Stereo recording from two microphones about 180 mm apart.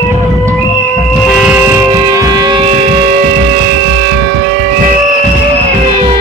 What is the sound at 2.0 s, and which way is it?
Music, 20° right (ahead or behind).